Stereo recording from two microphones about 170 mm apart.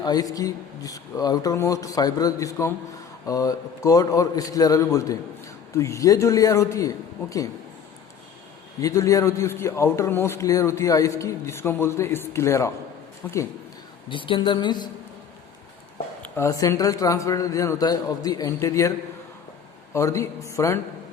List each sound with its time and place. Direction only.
0.0 s a man's voice: 20° left (ahead or behind)
8.8 s a man's voice: 20° left (ahead or behind)
14.1 s a man's voice: 30° left (ahead or behind)
16.2 s a man's voice: 15° left (ahead or behind)